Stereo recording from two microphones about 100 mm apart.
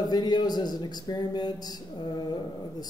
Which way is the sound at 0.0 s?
45° left (ahead or behind).